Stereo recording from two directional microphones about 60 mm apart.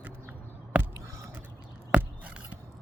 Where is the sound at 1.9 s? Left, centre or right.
Right.